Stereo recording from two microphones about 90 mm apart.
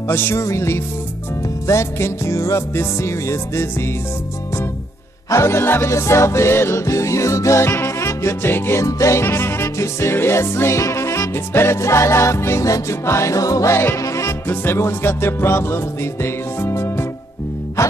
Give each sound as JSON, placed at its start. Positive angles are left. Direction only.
{"t": 0.1, "sound": "music", "side_deg": 25}
{"t": 5.3, "sound": "music", "side_deg": 30}
{"t": 8.8, "sound": "music", "side_deg": 35}
{"t": 14.5, "sound": "music", "side_deg": 25}